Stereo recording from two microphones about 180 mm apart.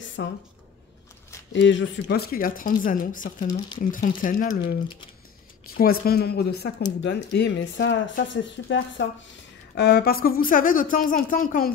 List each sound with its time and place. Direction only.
0.2 s speech: 90° left
1.5 s a woman's voice: 90° left; by 4.7 s 45° left (ahead or behind)
5.8 s speech: 55° left (ahead or behind)
7.0 s speech: 75° left (ahead or behind)
9.8 s a woman's voice: 60° left (ahead or behind)